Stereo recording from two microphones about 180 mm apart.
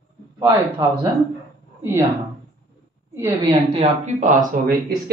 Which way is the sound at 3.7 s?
40° right (ahead or behind).